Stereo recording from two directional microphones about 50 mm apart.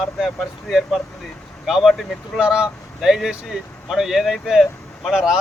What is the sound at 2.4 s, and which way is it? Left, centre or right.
Speech, centre.